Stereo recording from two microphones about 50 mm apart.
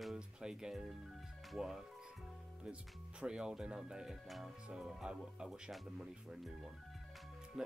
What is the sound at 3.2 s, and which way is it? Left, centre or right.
Speech, centre.